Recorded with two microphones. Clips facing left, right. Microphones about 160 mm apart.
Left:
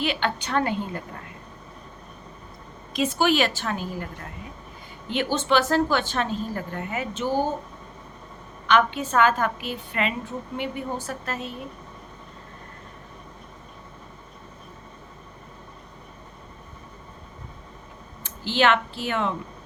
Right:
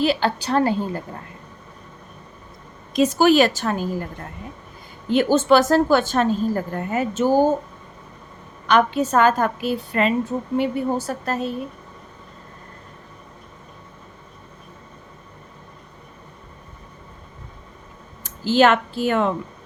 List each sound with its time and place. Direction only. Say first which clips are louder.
0.0 s a woman's voice: right 6 dB; 35° right (ahead or behind)
2.9 s a woman's voice: right 7 dB; 40° right (ahead or behind)
5.0 s a woman's voice: right 8 dB; 45° right (ahead or behind)
8.6 s a woman's voice: right 4 dB; 40° right (ahead or behind)
18.2 s speech: right 6 dB; 40° right (ahead or behind)